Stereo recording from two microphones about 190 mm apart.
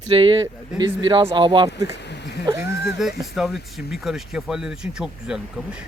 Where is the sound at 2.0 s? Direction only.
60° left (ahead or behind).